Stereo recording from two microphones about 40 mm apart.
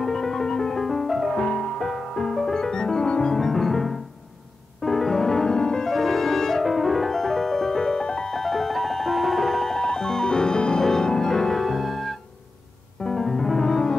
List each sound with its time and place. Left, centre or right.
0.0 s music: centre
0.8 s music: centre
1.3 s piano: centre
3.3 s piano: centre
4.8 s music: centre
5.9 s music: centre; by 8.4 s left
8.4 s music: centre
13.2 s music: centre